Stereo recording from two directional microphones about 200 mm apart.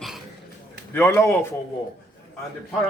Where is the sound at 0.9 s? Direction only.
10° left (ahead or behind).